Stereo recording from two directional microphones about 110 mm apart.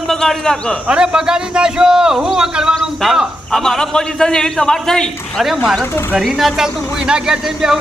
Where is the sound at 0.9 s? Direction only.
5° right (ahead or behind).